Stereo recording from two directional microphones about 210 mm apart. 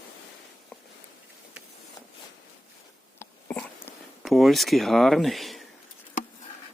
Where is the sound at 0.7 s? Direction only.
5° left (ahead or behind).